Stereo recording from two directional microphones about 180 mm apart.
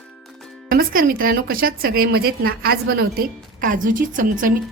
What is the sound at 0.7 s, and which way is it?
A woman's voice, 55° right (ahead or behind).